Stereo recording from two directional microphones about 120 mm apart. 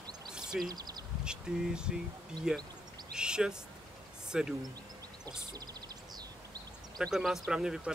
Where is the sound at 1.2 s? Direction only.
5° right (ahead or behind).